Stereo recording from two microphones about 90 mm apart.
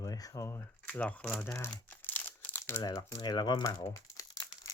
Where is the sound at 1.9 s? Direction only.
20° left (ahead or behind).